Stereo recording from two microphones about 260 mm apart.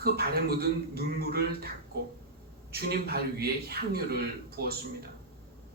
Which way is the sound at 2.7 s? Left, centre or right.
Right.